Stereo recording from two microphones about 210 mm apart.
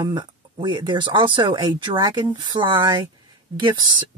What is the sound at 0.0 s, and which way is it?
A woman's voice, 20° right (ahead or behind).